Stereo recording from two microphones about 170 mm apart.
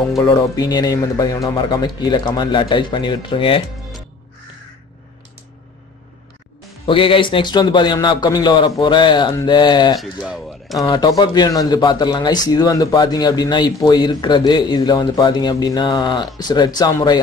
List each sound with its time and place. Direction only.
0.2 s speech: 25° left (ahead or behind)
6.9 s speech: 30° left (ahead or behind)
9.9 s speech: centre (ahead or behind)
10.8 s speech: 25° left (ahead or behind)